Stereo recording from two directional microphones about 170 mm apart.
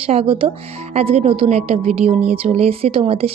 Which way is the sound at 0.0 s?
35° right (ahead or behind).